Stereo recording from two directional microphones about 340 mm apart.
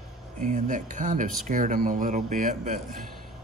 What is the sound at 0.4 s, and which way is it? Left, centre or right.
Speech, right.